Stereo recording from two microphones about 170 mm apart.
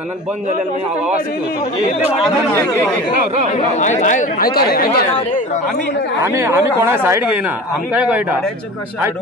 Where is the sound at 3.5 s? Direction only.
45° left (ahead or behind); by 4.9 s 60° left (ahead or behind).